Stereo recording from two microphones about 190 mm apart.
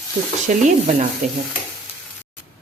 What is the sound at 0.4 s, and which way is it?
Speech, 40° right (ahead or behind).